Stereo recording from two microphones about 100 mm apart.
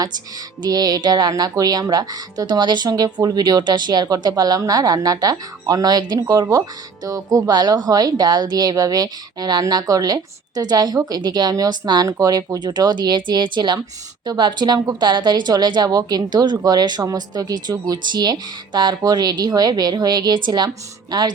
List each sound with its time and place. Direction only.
0.6 s speech: 40° right (ahead or behind)
12.0 s speech: 35° right (ahead or behind)